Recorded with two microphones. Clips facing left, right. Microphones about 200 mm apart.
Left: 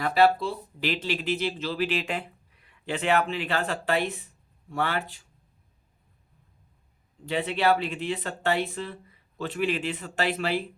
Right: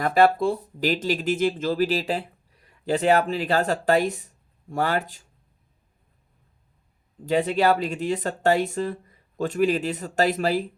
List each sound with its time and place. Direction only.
0.0 s speech: 50° right (ahead or behind)
7.3 s speech: 45° right (ahead or behind)